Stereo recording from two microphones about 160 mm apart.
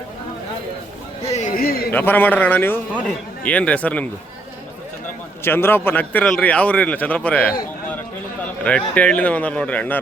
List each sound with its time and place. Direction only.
1.3 s a sound: 50° left (ahead or behind)
1.9 s a man's voice: 10° left (ahead or behind)
5.5 s a man's voice: 15° left (ahead or behind)
8.6 s a man's voice: 5° left (ahead or behind)